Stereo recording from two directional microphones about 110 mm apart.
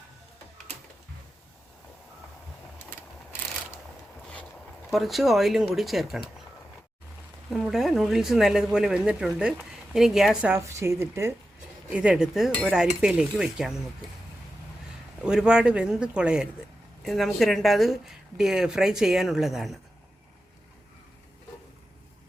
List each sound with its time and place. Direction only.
4.9 s speech: centre (ahead or behind)
7.5 s speech: centre (ahead or behind)
10.6 s speech: 25° right (ahead or behind)
11.9 s speech: 10° right (ahead or behind)
15.2 s speech: 10° right (ahead or behind)